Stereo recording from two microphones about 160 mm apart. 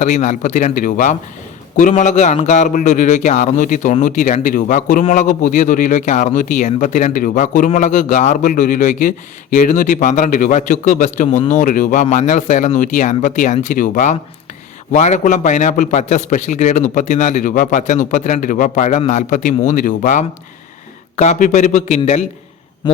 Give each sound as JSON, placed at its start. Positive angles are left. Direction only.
{"t": 0.0, "sound": "a man's voice", "side_deg": 50}